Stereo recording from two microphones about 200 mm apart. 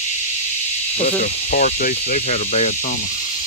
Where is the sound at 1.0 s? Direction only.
40° left (ahead or behind).